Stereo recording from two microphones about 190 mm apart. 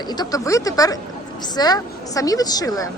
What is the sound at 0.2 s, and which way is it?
A woman's voice, 20° left (ahead or behind).